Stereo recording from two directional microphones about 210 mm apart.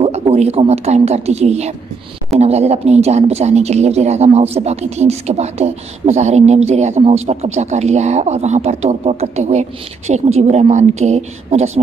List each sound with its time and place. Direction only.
0.0 s speech: 30° right (ahead or behind)